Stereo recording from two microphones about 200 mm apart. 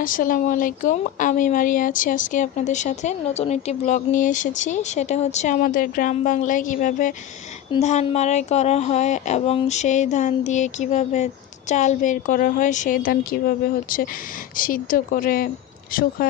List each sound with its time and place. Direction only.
0.0 s speech: 45° left (ahead or behind)
14.6 s speech: 45° left (ahead or behind)